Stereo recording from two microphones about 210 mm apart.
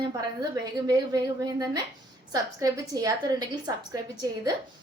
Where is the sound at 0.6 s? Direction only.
20° right (ahead or behind).